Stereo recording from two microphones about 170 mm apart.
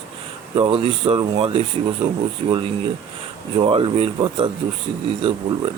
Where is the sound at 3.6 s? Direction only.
30° right (ahead or behind).